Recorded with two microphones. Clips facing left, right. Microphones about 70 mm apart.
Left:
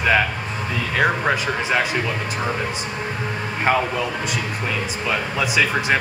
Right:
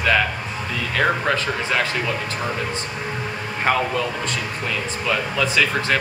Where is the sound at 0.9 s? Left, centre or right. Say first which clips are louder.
Left 1 dB; centre.